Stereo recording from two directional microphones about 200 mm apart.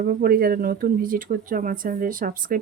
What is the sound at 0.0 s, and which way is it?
Speech, 50° right (ahead or behind).